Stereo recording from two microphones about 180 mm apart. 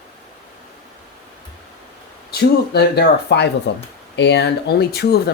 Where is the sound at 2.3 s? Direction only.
65° left (ahead or behind).